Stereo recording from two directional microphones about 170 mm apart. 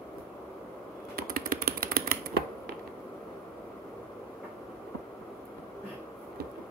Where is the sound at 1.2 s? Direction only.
60° right (ahead or behind).